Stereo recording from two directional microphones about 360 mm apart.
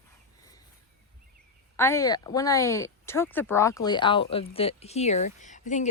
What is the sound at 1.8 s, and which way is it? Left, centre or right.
Speech, centre.